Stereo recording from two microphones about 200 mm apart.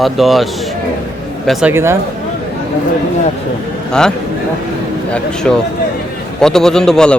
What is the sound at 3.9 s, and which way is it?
Speech, 5° left (ahead or behind).